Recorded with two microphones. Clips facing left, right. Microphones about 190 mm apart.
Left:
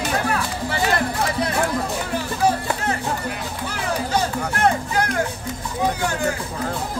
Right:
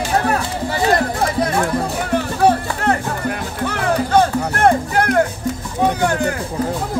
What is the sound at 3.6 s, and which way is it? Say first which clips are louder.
Music: right 7 dB; 60° right (ahead or behind).